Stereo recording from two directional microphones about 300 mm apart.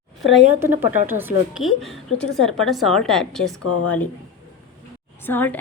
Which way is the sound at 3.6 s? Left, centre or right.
Left.